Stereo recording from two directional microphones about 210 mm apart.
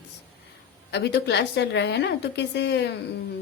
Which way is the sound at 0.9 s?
55° left (ahead or behind).